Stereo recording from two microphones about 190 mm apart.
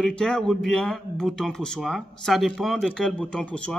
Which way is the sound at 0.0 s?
5° left (ahead or behind).